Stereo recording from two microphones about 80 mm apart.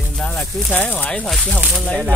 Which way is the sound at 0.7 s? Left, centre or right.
Left.